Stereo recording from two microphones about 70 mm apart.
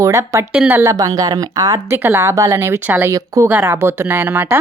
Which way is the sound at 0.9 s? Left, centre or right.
Right.